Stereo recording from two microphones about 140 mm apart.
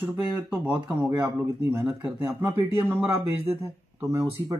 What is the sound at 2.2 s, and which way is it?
Speech, 15° right (ahead or behind).